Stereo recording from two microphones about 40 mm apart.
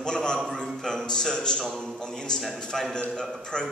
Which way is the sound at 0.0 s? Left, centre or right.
Centre.